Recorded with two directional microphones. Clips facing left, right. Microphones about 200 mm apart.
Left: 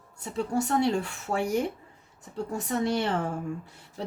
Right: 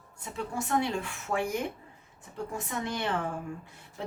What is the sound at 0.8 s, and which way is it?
A woman's voice, 40° left (ahead or behind).